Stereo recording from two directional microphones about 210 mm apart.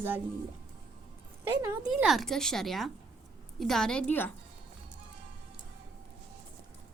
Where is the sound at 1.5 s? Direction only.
10° right (ahead or behind); by 4.3 s 10° left (ahead or behind).